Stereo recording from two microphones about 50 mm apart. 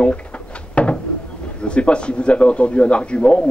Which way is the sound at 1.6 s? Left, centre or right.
Left.